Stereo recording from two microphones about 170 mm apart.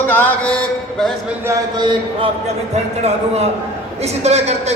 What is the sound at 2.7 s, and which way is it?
A man's voice, 40° right (ahead or behind).